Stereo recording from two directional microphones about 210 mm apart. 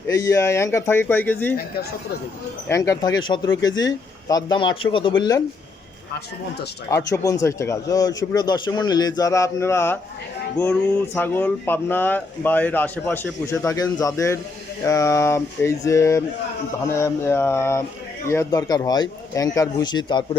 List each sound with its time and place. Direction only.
0.1 s speech: 15° left (ahead or behind)
2.6 s speech: 15° left (ahead or behind)
6.9 s speech: 15° left (ahead or behind)